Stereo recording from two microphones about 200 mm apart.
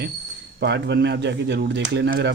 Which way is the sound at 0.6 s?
60° right (ahead or behind).